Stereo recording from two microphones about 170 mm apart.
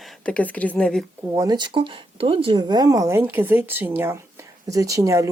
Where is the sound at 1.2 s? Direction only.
15° right (ahead or behind).